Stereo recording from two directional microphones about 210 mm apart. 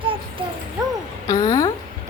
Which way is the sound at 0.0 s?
25° right (ahead or behind).